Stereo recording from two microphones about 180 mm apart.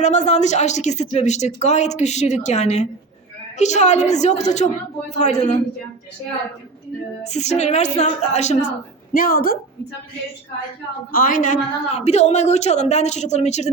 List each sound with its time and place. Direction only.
0.0 s speech: 40° left (ahead or behind)
7.3 s speech: 40° left (ahead or behind)
9.1 s a woman's voice: 50° left (ahead or behind)
11.1 s speech: 50° left (ahead or behind)